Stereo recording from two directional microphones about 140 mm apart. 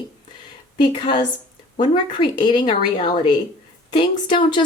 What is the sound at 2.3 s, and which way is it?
Speech, 35° left (ahead or behind).